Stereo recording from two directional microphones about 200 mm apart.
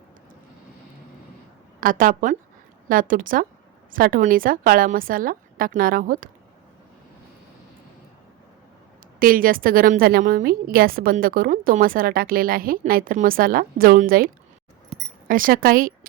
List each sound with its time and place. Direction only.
1.8 s a woman's voice: 45° right (ahead or behind)
9.1 s a woman's voice: 45° right (ahead or behind)